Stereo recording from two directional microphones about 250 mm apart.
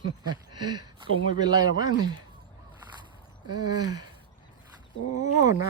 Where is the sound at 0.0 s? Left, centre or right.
Centre.